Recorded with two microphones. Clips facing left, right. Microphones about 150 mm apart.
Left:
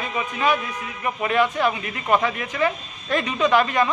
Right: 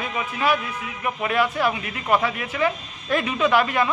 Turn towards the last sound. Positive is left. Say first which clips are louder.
# left 1 dB
turn(degrees=-10)  # may be behind; listen again after turning